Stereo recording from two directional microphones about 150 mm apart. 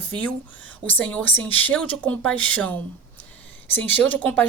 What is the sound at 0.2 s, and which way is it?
Speech, 10° left (ahead or behind).